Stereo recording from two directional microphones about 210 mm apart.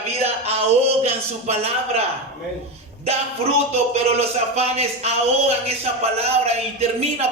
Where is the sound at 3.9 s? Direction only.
30° right (ahead or behind).